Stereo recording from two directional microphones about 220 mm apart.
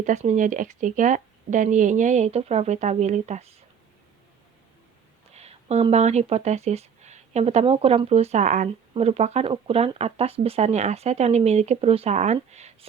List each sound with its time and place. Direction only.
0.0 s speech: 30° right (ahead or behind)
5.3 s speech: 30° right (ahead or behind)